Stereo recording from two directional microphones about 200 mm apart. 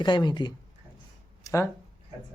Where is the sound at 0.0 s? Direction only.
20° left (ahead or behind).